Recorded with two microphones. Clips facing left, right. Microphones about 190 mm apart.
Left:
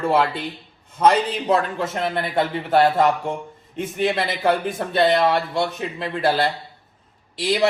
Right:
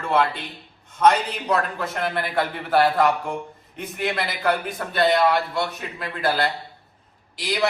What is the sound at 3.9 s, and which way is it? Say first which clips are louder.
A man's voice: left 4 dB; 25° left (ahead or behind).